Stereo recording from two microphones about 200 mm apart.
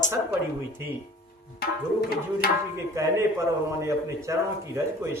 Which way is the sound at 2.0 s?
50° left (ahead or behind).